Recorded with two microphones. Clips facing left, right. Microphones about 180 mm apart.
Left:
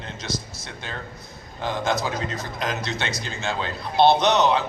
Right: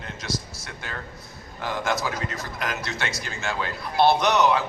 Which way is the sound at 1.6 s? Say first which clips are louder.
Left 2 dB; 20° left (ahead or behind).